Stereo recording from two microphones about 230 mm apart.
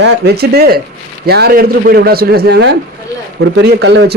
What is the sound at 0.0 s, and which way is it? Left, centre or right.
A man's voice, right.